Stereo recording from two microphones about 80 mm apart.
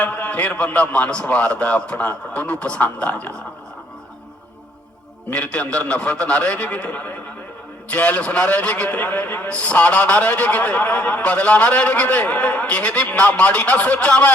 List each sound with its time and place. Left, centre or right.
0.0 s a man's voice: centre
5.3 s a man's voice: centre